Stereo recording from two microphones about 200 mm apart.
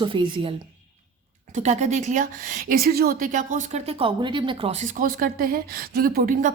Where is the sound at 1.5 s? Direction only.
35° right (ahead or behind).